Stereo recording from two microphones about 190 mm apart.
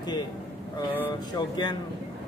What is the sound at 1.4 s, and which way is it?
Speech, 20° left (ahead or behind).